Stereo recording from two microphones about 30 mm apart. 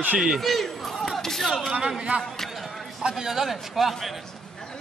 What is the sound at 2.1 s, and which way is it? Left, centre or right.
Speech, right.